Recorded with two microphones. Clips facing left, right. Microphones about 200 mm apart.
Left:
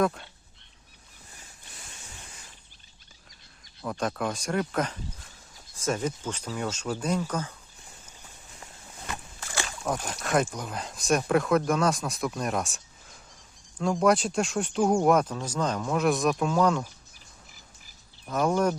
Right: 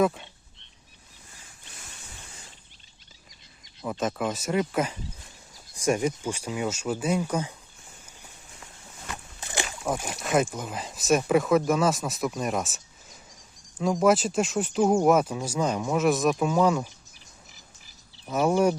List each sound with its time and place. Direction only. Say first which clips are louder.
0.0 s speech: right 2 dB; centre (ahead or behind)
4.0 s speech: right 2 dB; 5° right (ahead or behind)
9.4 s speech: right 4 dB; 20° right (ahead or behind)
18.3 s speech: right 3 dB; 10° right (ahead or behind)